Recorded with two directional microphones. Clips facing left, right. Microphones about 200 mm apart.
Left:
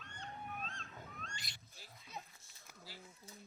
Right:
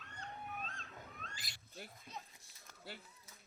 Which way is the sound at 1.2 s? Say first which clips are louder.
Left 1 dB; centre (ahead or behind).